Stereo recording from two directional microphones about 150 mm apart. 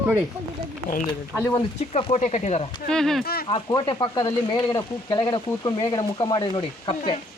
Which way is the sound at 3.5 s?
30° left (ahead or behind).